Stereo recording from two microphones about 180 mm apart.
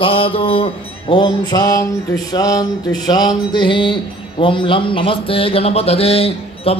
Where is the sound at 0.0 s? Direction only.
30° left (ahead or behind).